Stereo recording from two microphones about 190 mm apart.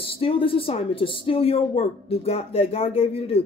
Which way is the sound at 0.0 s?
30° left (ahead or behind).